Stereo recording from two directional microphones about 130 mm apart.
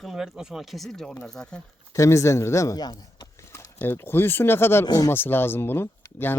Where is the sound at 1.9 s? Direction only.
20° left (ahead or behind).